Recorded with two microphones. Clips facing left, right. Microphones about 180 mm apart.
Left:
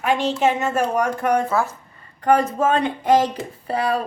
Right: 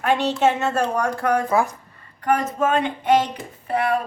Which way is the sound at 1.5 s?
15° right (ahead or behind).